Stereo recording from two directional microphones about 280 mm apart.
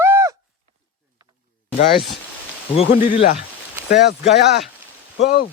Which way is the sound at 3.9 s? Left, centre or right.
Left.